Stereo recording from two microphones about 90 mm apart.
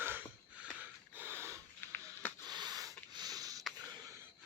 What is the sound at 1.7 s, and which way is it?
Music, 20° left (ahead or behind).